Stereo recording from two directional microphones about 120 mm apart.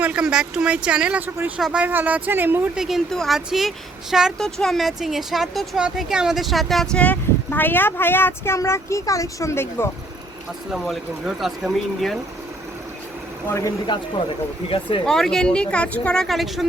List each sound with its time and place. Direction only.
0.0 s speech: 10° right (ahead or behind)
2.7 s speech: 5° right (ahead or behind)
7.0 s speech: 15° left (ahead or behind)
10.7 s speech: centre (ahead or behind)
13.5 s speech: 25° left (ahead or behind)
14.7 s speech: 45° left (ahead or behind)
15.0 s speech: 5° left (ahead or behind)